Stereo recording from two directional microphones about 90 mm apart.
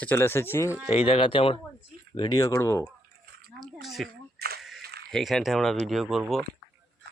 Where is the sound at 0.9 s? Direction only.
90° left.